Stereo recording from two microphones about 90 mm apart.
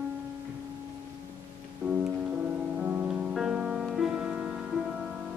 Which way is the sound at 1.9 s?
10° right (ahead or behind).